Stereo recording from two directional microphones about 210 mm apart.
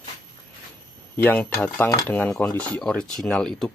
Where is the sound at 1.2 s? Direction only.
10° left (ahead or behind).